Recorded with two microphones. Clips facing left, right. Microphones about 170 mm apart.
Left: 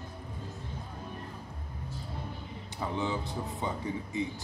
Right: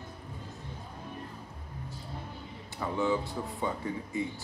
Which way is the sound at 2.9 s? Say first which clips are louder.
Right 4 dB; 20° left (ahead or behind).